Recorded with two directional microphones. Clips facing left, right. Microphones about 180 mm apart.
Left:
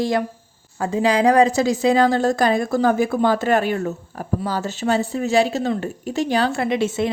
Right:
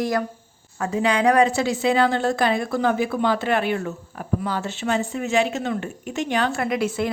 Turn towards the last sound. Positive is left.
turn(degrees=25)  # may be behind; listen again after turning